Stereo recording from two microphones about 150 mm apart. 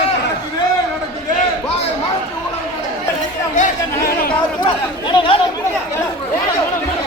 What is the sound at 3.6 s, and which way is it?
Chatter, 75° left (ahead or behind).